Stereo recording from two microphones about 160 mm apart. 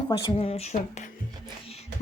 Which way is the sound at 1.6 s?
40° left (ahead or behind).